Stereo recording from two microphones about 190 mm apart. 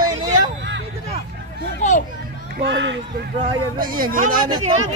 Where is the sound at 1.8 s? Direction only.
40° left (ahead or behind).